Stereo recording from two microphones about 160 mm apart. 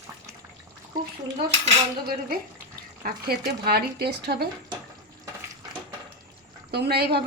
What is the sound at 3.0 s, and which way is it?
Speech, 75° right (ahead or behind).